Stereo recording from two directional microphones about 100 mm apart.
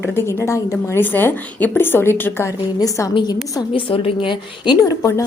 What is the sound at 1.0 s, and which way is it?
A woman's voice, 20° left (ahead or behind).